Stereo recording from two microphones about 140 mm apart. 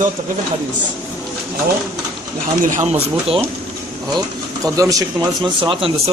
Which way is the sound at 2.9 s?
45° right (ahead or behind).